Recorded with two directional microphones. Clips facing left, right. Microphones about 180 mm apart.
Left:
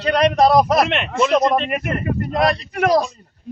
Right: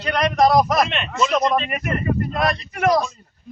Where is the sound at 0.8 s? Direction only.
70° left (ahead or behind).